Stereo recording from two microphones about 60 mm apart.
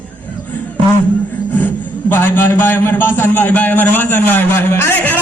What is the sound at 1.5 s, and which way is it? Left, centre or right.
Music, left.